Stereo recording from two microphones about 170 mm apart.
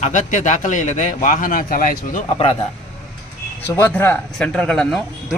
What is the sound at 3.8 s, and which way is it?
Speech, 10° left (ahead or behind).